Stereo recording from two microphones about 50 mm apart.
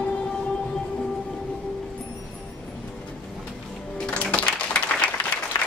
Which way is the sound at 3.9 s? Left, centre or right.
Centre.